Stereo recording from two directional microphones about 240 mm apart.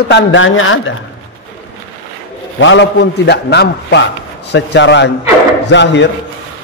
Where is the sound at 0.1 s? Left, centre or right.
Left.